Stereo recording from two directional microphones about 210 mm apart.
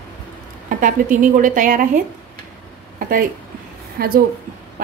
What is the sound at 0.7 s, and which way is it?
A woman's voice, 40° right (ahead or behind).